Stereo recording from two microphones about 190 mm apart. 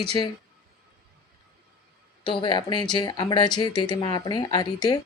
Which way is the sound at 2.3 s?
25° left (ahead or behind).